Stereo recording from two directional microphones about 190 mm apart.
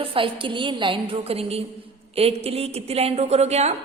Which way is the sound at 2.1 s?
30° right (ahead or behind).